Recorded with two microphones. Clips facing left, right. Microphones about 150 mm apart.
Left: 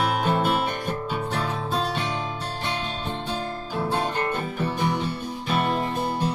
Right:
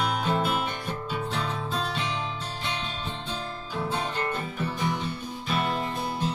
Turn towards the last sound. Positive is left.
turn(degrees=55)  # may be behind; listen again after turning